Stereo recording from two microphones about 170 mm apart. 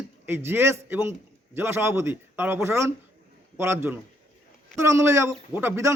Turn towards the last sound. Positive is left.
turn(degrees=-15)  # may be behind; listen again after turning